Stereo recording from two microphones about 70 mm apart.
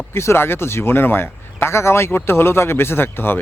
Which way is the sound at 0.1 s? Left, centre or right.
Left.